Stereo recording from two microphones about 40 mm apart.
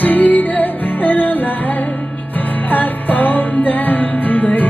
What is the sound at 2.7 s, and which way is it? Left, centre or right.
Music, left.